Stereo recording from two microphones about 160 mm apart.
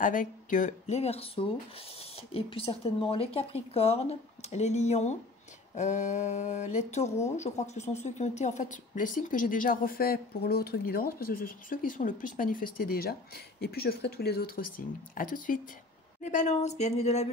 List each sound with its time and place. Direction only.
0.0 s speech: 55° left (ahead or behind); by 14.6 s 75° left (ahead or behind)
15.1 s speech: 60° left (ahead or behind); by 17.3 s 40° left (ahead or behind)